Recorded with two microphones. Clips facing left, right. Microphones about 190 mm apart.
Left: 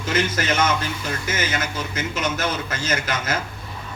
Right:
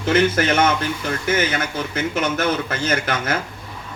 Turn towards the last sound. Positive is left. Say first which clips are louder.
# right 3 dB
turn(degrees=-60)  # may be behind; listen again after turning